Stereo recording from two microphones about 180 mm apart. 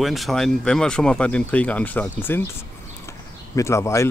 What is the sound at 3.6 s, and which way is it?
Speech, 15° left (ahead or behind).